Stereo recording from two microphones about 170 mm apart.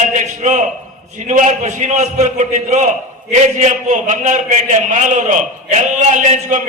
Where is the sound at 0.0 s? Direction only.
45° right (ahead or behind).